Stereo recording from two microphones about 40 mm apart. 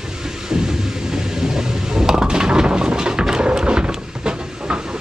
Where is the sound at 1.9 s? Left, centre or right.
Centre.